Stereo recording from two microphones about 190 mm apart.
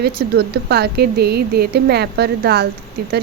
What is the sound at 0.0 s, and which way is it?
Speech, 60° right (ahead or behind).